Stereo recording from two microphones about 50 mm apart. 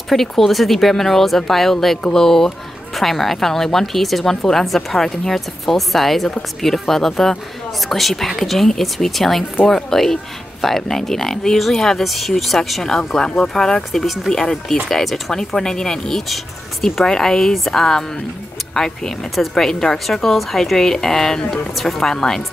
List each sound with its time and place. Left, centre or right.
0.1 s a woman's voice: centre
14.0 s speech: centre
14.3 s a woman's voice: centre